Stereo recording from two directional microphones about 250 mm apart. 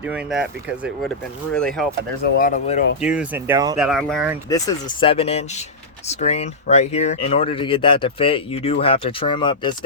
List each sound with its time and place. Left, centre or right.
0.0 s speech: centre
2.2 s speech: left
3.0 s speech: centre
3.8 s speech: centre
4.4 s speech: centre